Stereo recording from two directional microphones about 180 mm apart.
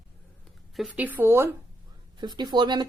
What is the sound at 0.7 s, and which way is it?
Speech, 5° right (ahead or behind).